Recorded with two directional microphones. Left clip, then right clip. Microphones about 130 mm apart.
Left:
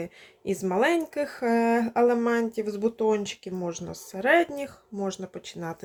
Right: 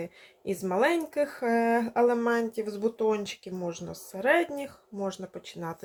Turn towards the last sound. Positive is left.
turn(degrees=20)  # may be behind; listen again after turning